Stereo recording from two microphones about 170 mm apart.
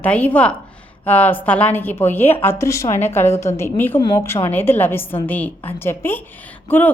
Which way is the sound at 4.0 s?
25° left (ahead or behind).